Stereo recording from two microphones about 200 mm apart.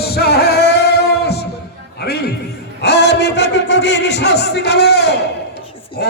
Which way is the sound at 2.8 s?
55° left (ahead or behind).